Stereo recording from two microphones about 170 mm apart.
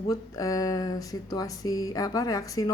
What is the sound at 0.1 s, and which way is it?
Speech, 20° left (ahead or behind).